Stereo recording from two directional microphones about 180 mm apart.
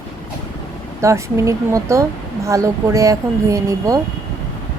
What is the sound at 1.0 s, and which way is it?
Speech, 15° right (ahead or behind).